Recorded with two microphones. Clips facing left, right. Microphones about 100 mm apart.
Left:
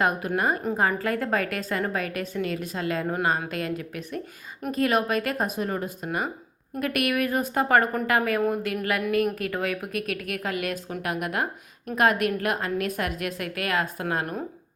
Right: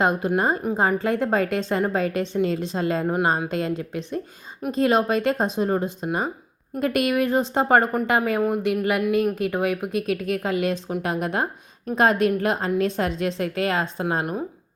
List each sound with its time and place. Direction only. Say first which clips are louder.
0.0 s a woman's voice: right 3 dB; 25° right (ahead or behind)
0.6 s a woman's voice: right 3 dB; 15° right (ahead or behind)